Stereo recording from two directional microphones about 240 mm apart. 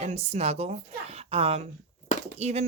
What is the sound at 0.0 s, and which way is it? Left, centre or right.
Speech, right.